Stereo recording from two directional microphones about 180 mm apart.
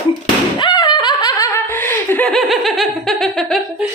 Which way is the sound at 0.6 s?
25° left (ahead or behind).